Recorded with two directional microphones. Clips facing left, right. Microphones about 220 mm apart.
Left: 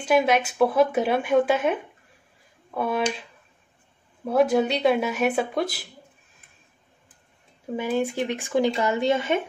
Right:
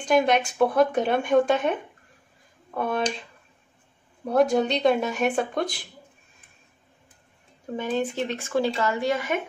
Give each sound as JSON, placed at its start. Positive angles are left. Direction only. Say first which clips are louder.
{"t": 0.0, "sound": "speech", "louder": "even", "side_deg": 5}
{"t": 4.3, "sound": "speech", "louder": "left 1 dB", "side_deg": 5}
{"t": 7.7, "sound": "speech", "louder": "left 2 dB", "side_deg": 10}